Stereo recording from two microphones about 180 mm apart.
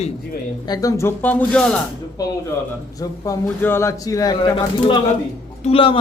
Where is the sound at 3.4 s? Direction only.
10° left (ahead or behind).